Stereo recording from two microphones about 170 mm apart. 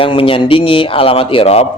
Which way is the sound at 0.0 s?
30° left (ahead or behind).